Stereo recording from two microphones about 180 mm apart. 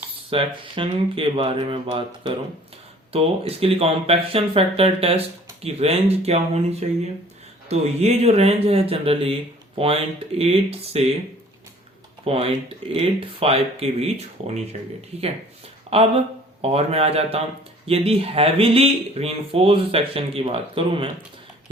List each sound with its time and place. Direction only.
0.3 s speech: 30° right (ahead or behind)
12.2 s speech: 35° right (ahead or behind)
15.9 s a sound: 35° right (ahead or behind)
16.6 s speech: 35° right (ahead or behind)